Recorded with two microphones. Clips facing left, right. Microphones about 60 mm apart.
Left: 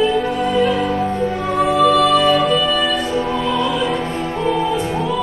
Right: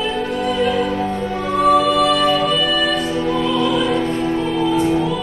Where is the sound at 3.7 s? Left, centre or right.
Left.